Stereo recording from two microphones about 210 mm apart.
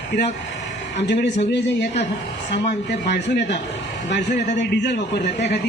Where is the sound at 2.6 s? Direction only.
55° left (ahead or behind).